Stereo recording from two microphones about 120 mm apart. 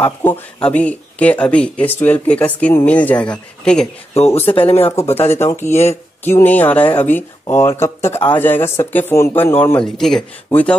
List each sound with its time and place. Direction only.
0.0 s speech: 15° left (ahead or behind)
4.6 s speech: 50° left (ahead or behind)
5.1 s speech: 20° left (ahead or behind)
9.8 s speech: 5° left (ahead or behind)